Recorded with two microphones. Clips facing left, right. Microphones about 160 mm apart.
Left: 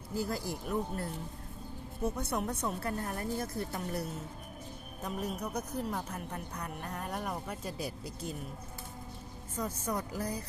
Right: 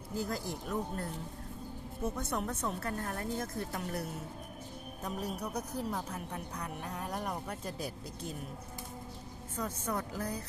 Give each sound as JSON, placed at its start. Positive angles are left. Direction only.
{"t": 0.2, "sound": "a woman's voice", "side_deg": 5}
{"t": 2.1, "sound": "a woman's voice", "side_deg": 10}
{"t": 5.0, "sound": "a woman's voice", "side_deg": 0}
{"t": 9.6, "sound": "a woman's voice", "side_deg": 5}